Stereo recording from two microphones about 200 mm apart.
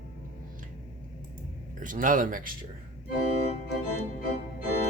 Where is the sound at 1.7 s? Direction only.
40° right (ahead or behind).